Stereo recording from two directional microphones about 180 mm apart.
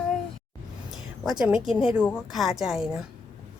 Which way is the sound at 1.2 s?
5° right (ahead or behind).